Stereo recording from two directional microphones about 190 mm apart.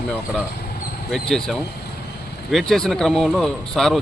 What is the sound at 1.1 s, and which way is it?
Speech, centre (ahead or behind).